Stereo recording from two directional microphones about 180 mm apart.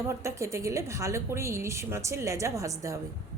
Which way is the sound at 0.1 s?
15° right (ahead or behind).